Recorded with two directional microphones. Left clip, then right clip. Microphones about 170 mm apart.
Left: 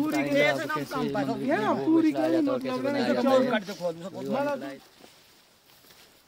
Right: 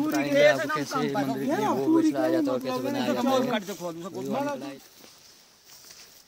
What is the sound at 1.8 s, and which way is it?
Speech, 45° right (ahead or behind).